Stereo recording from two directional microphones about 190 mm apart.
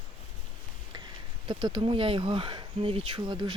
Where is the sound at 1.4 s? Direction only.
25° right (ahead or behind).